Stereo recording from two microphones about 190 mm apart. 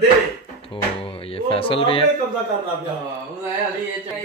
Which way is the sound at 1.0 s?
30° left (ahead or behind).